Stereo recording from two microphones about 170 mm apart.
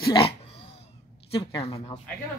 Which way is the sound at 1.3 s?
30° left (ahead or behind).